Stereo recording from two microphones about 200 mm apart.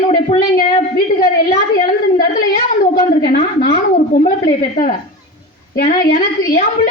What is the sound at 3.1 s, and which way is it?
A woman's voice, 45° left (ahead or behind).